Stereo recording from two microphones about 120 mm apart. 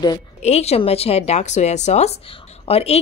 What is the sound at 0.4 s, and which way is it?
Speech, 65° left (ahead or behind).